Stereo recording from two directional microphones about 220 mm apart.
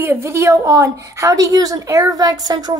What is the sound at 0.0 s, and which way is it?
A woman's voice, 10° right (ahead or behind).